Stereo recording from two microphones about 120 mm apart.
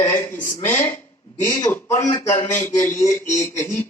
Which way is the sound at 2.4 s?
90° left.